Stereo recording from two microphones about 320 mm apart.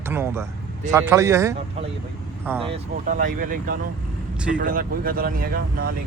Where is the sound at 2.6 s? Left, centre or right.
Right.